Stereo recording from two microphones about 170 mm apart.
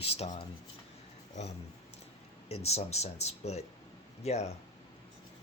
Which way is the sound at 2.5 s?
40° left (ahead or behind).